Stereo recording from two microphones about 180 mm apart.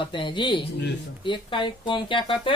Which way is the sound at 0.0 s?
25° left (ahead or behind).